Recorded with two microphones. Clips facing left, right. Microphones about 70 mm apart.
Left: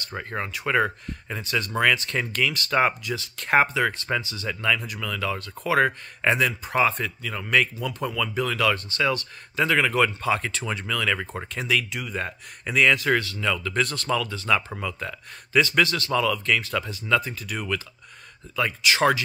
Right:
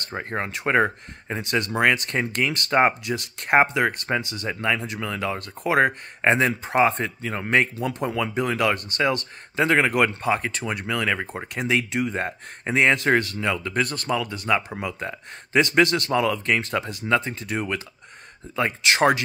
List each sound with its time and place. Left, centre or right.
0.1 s speech: right
7.2 s speech: right